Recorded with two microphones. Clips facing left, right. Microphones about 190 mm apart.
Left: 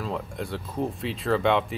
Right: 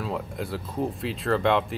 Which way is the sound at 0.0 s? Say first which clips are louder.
Right 1 dB; centre (ahead or behind).